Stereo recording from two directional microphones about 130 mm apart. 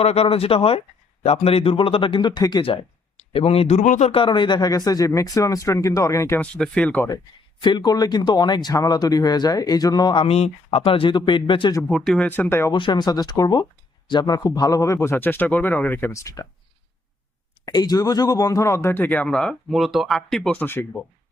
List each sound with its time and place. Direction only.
0.0 s a man's voice: 50° left (ahead or behind); by 4.1 s 65° left (ahead or behind)
4.1 s speech: 40° left (ahead or behind); by 6.4 s 25° left (ahead or behind)
6.4 s speech: 10° left (ahead or behind)
7.6 s speech: 35° left (ahead or behind)
10.2 s a man's voice: 50° left (ahead or behind)
11.9 s speech: 5° left (ahead or behind)
12.2 s speech: 15° left (ahead or behind)
12.7 s speech: 35° left (ahead or behind)
17.7 s speech: 30° left (ahead or behind); by 20.8 s 15° left (ahead or behind)